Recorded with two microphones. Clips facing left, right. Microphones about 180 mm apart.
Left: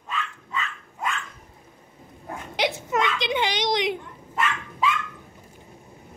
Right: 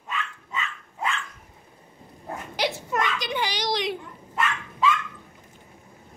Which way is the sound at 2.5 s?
20° left (ahead or behind).